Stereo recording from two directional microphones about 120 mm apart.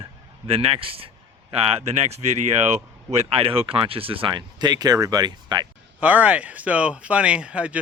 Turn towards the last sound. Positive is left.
turn(degrees=-10)  # may be behind; listen again after turning